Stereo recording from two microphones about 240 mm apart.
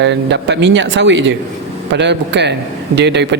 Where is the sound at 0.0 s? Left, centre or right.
Right.